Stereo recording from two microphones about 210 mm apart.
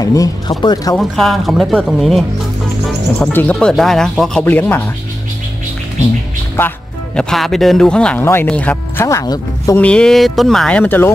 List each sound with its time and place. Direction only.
0.0 s speech: 15° left (ahead or behind)
0.9 s speech: centre (ahead or behind)
7.2 s speech: centre (ahead or behind)
9.8 s speech: 5° left (ahead or behind)